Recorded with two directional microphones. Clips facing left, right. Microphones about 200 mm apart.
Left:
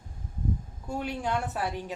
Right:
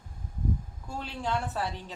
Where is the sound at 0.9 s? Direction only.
15° left (ahead or behind).